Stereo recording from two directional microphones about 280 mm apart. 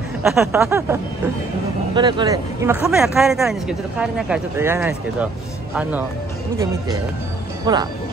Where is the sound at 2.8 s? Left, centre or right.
Centre.